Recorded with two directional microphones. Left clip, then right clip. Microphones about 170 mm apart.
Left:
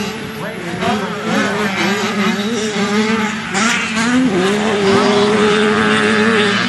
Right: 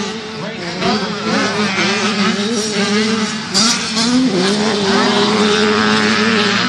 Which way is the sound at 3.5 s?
55° right (ahead or behind).